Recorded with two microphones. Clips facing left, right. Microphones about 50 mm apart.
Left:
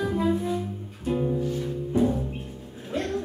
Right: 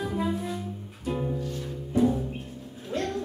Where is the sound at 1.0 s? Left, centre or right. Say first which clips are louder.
Left 4 dB; centre.